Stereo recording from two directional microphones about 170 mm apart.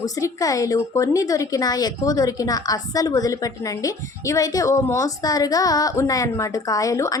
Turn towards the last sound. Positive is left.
turn(degrees=20)  # may be behind; listen again after turning